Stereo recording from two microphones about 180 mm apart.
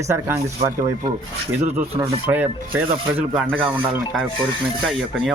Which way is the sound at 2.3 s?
10° right (ahead or behind).